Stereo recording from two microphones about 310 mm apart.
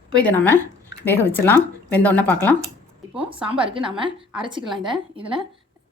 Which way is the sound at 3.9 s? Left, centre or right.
Centre.